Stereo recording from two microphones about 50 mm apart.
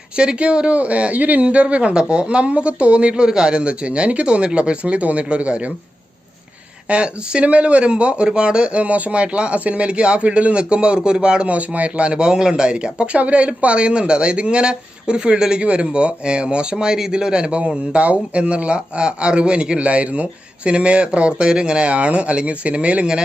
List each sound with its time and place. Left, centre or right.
0.2 s speech: right
6.8 s speech: right